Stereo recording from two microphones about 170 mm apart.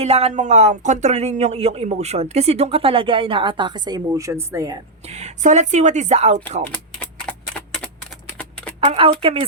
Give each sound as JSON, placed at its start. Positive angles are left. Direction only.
{"t": 0.0, "sound": "speech", "side_deg": -35}
{"t": 5.0, "sound": "speech", "side_deg": -40}
{"t": 6.7, "sound": "typing", "side_deg": 10}
{"t": 8.8, "sound": "speech", "side_deg": -35}